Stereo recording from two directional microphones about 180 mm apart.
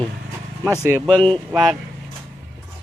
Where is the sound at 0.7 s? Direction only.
10° left (ahead or behind).